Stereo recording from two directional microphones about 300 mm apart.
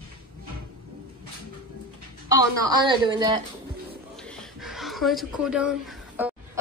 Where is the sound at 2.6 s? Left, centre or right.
Centre.